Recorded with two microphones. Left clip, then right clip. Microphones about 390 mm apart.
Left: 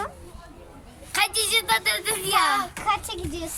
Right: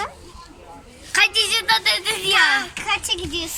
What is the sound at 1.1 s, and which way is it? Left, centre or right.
Speech, centre.